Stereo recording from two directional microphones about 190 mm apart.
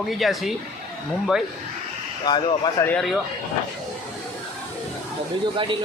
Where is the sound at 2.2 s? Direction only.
25° left (ahead or behind).